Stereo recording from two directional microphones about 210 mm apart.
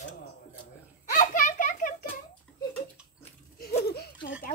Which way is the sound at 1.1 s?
35° left (ahead or behind).